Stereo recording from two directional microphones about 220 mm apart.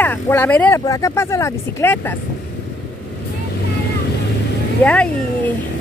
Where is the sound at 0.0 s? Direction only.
10° left (ahead or behind).